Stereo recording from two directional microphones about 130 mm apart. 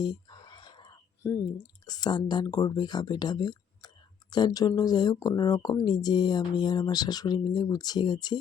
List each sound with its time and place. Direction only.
0.0 s whispering: 35° left (ahead or behind)
1.9 s speech: 30° left (ahead or behind)